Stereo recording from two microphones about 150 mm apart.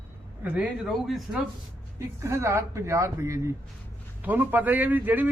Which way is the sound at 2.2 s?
20° right (ahead or behind).